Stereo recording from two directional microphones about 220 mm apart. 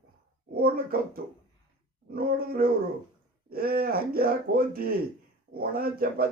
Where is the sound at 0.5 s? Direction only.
40° right (ahead or behind).